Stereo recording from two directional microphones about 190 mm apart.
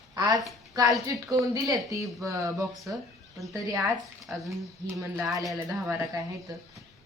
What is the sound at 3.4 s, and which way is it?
Speech, 15° right (ahead or behind).